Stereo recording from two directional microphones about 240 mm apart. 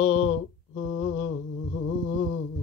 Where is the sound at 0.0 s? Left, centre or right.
Left.